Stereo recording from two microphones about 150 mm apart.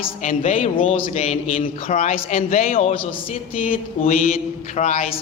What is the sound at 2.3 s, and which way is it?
Speech, 60° left (ahead or behind).